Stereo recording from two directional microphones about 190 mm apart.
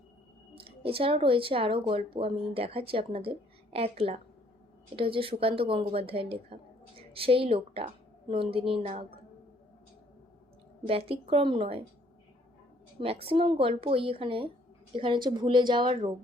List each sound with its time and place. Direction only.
0.5 s a woman's voice: 30° right (ahead or behind)
10.8 s speech: 30° right (ahead or behind)
13.0 s speech: 30° right (ahead or behind)